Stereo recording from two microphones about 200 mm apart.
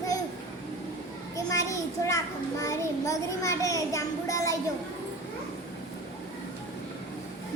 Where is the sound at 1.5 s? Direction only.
15° left (ahead or behind).